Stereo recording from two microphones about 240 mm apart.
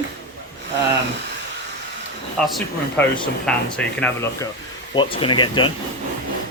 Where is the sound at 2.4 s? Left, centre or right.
Centre.